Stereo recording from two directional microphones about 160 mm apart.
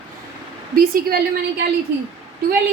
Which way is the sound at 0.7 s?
65° right (ahead or behind).